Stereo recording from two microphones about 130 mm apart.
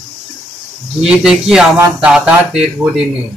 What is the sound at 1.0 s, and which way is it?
Speech, 5° right (ahead or behind).